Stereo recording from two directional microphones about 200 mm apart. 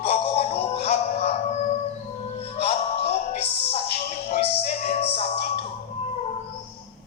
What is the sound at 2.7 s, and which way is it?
Music, 30° left (ahead or behind).